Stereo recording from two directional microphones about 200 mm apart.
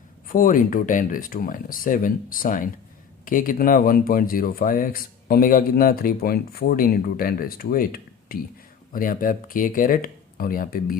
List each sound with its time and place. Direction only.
0.3 s speech: 45° left (ahead or behind)